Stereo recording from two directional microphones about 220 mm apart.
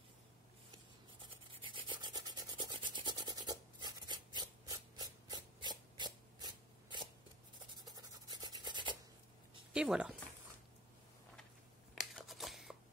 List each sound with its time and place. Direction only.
1.2 s rub: 20° right (ahead or behind)
7.7 s a sound: 20° right (ahead or behind)
9.7 s speech: 5° right (ahead or behind)
11.9 s scissors: centre (ahead or behind)